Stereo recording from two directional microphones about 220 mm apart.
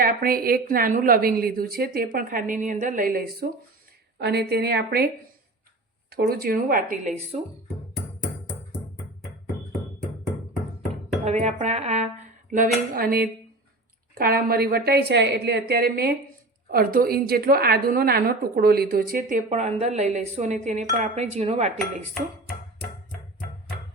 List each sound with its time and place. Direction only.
0.0 s a woman's voice: 40° right (ahead or behind)
6.1 s a woman's voice: 45° right (ahead or behind)
11.3 s a woman's voice: 30° right (ahead or behind)